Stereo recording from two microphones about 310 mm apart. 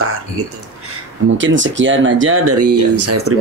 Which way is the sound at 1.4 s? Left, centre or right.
Right.